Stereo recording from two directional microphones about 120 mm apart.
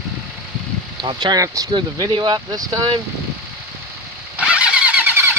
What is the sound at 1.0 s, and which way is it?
Speech, 40° right (ahead or behind).